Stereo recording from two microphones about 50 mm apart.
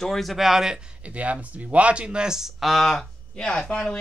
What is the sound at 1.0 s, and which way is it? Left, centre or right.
Speech, right.